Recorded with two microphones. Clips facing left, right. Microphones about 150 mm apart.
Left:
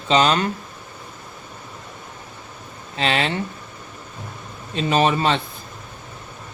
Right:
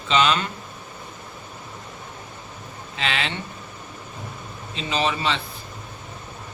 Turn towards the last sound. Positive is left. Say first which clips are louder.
# left 6 dB
turn(degrees=45)  # may be behind; listen again after turning